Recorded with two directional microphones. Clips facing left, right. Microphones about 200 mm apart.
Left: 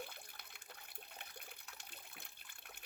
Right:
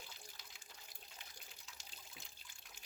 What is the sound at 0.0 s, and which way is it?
Water, 60° left (ahead or behind).